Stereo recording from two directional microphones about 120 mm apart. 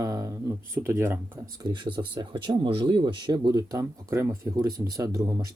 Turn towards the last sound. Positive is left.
turn(degrees=-30)  # may be behind; listen again after turning